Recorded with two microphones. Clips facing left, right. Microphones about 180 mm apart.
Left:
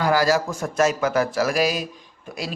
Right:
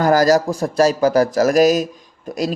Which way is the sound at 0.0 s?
40° right (ahead or behind).